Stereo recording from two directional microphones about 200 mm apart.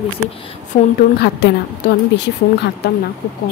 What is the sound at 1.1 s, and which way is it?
Speech, 55° left (ahead or behind).